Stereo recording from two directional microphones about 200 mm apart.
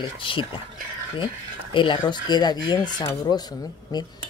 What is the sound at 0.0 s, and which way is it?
Speech, 25° left (ahead or behind).